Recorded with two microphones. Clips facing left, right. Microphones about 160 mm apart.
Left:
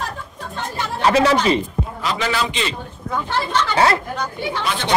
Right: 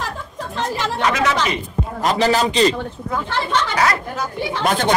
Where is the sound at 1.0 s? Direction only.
30° left (ahead or behind).